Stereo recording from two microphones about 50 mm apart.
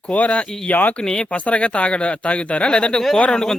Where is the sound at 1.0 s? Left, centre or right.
Centre.